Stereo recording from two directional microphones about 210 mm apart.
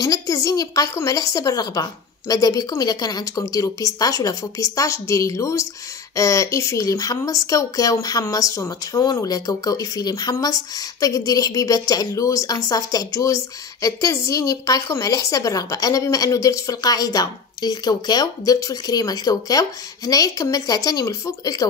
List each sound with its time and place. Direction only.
0.0 s speech: 15° left (ahead or behind)